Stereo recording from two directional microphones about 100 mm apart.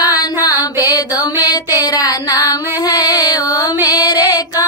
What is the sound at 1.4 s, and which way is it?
Music, 40° left (ahead or behind).